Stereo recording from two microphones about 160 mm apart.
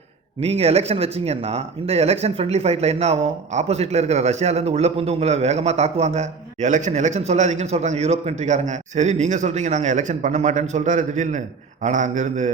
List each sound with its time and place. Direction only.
0.3 s speech: 40° right (ahead or behind)